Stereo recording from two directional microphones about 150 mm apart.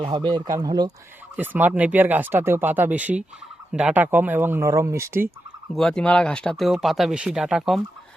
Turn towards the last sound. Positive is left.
turn(degrees=0)  # may be behind; listen again after turning